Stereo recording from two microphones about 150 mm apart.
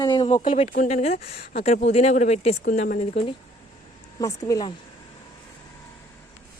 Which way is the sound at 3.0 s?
40° left (ahead or behind).